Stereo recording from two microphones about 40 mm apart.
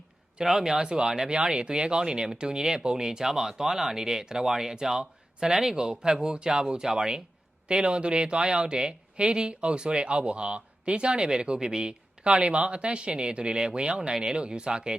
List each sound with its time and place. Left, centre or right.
0.4 s speech: centre
12.3 s speech: right